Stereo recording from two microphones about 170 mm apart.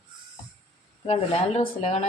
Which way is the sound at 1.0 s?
35° left (ahead or behind).